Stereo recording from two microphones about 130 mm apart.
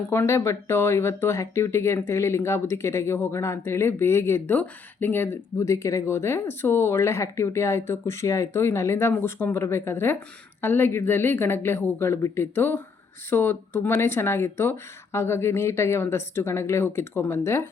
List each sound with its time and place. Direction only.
0.1 s a woman's voice: 20° left (ahead or behind)